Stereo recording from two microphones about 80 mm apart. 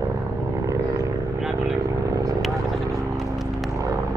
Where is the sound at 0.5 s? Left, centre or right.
Right.